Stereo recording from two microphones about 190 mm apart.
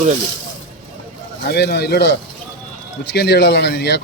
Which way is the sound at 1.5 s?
60° left (ahead or behind).